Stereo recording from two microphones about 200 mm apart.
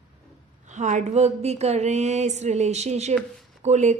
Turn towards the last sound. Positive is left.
turn(degrees=-35)  # may be behind; listen again after turning